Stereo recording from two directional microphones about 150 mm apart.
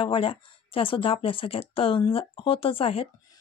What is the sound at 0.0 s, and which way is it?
Speech, 35° left (ahead or behind).